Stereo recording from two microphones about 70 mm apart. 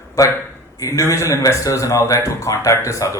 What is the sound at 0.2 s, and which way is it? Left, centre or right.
A man's voice, left.